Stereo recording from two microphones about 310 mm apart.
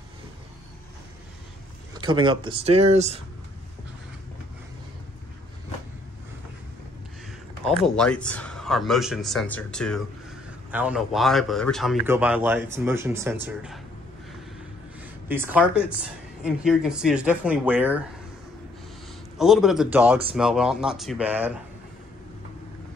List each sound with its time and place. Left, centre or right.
2.0 s speech: centre
7.7 s speech: centre
15.2 s speech: centre
19.3 s speech: centre